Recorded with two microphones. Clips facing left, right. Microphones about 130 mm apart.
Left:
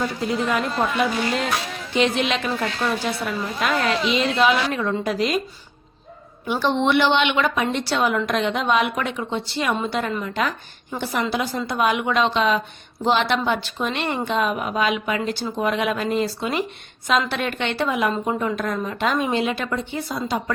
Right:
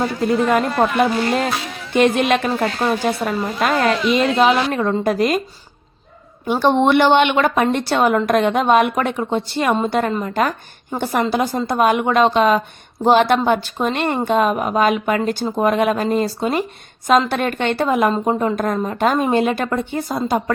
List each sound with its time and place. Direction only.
0.0 s a woman's voice: 50° right (ahead or behind)
6.4 s a woman's voice: 45° right (ahead or behind)